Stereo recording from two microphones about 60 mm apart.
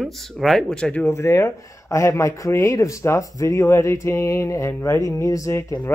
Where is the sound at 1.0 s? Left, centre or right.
Left.